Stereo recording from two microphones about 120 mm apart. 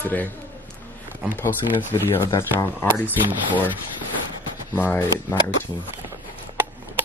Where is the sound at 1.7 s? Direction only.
20° left (ahead or behind).